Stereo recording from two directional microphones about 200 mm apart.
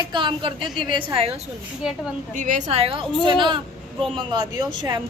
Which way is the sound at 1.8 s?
5° right (ahead or behind).